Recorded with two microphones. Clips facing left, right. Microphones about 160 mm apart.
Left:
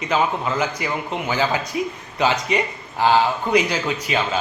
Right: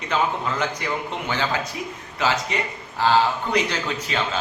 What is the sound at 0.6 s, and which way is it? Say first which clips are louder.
A man's voice: left 2 dB; 10° left (ahead or behind).